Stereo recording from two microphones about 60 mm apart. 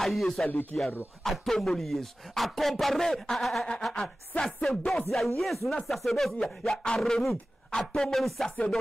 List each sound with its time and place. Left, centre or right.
0.0 s speech: centre
0.7 s speech: centre
1.2 s speech: centre
6.3 s music: centre
6.8 s speech: centre